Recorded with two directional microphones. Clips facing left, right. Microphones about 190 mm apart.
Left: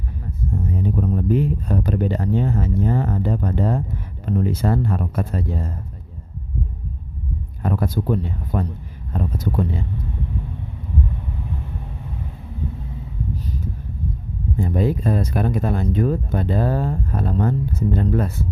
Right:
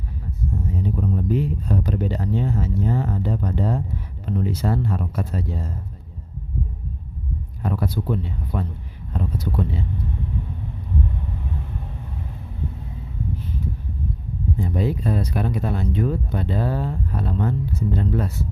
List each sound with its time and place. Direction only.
0.7 s speech: 55° left (ahead or behind)
7.6 s speech: 50° left (ahead or behind)
14.6 s speech: 50° left (ahead or behind)